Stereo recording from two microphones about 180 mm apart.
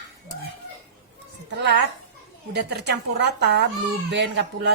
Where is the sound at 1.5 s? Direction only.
70° right (ahead or behind).